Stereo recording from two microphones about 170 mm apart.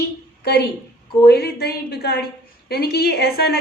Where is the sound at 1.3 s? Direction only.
70° left (ahead or behind).